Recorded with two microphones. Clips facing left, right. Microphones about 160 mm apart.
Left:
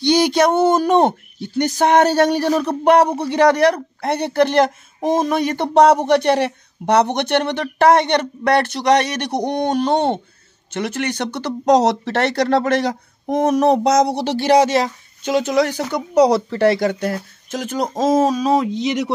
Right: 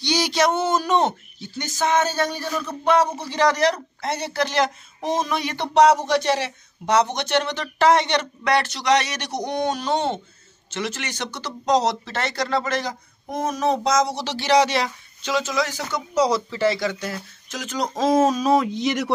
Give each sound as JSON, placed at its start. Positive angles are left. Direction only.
{"t": 0.0, "sound": "speech", "side_deg": 55}
{"t": 17.9, "sound": "speech", "side_deg": 40}
{"t": 18.4, "sound": "speech", "side_deg": 25}